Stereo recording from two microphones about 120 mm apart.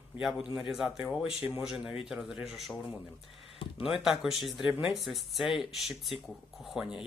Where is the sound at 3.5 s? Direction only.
45° left (ahead or behind).